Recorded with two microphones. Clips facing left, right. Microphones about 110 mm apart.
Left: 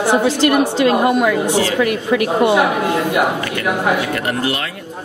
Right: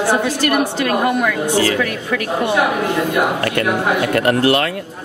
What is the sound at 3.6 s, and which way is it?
Speech, 50° right (ahead or behind).